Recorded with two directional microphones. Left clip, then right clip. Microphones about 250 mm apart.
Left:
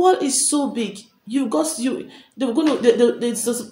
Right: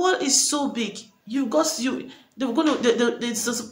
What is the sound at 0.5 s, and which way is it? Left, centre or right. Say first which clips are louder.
Speech: left 4 dB; right.